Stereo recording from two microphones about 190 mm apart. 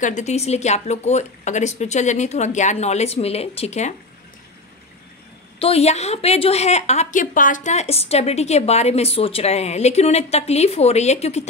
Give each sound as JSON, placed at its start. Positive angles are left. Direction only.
{"t": 0.0, "sound": "a woman's voice", "side_deg": 40}
{"t": 5.6, "sound": "a woman's voice", "side_deg": 30}